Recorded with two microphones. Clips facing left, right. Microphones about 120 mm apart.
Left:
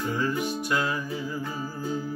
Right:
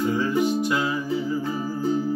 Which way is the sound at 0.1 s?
15° right (ahead or behind).